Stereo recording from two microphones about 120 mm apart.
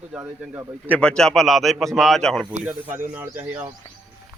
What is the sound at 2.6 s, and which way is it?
Speech, 15° right (ahead or behind).